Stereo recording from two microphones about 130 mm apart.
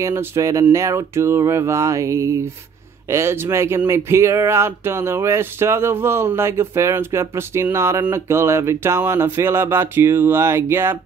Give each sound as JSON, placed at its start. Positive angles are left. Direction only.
{"t": 0.0, "sound": "speech", "side_deg": -20}